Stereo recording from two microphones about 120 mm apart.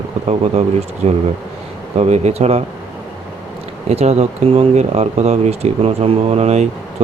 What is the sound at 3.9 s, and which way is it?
Speech, 60° right (ahead or behind).